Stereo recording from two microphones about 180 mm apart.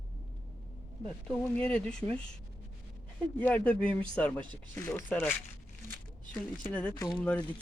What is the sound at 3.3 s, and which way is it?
Speech, 10° left (ahead or behind).